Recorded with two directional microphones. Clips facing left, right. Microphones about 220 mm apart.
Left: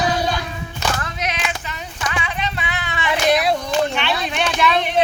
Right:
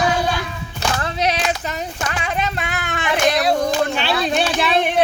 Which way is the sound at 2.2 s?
45° right (ahead or behind).